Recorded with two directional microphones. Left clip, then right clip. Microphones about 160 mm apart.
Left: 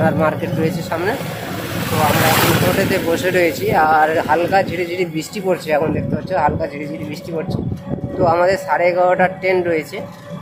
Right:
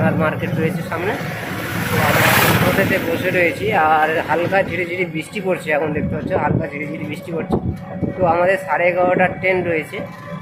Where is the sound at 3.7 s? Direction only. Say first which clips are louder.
Left 2 dB; 5° left (ahead or behind).